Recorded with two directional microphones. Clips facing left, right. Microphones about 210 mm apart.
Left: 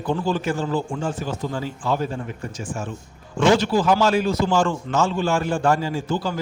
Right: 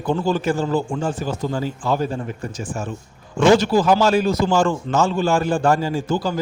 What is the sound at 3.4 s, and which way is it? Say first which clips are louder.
A man's voice: right 3 dB; 40° right (ahead or behind).